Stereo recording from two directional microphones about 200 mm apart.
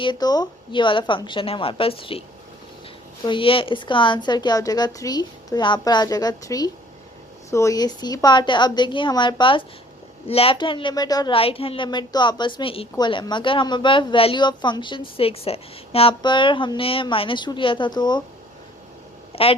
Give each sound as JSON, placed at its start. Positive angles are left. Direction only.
{"t": 0.0, "sound": "a woman's voice", "side_deg": 20}
{"t": 3.2, "sound": "a woman's voice", "side_deg": 25}
{"t": 19.3, "sound": "a woman's voice", "side_deg": 30}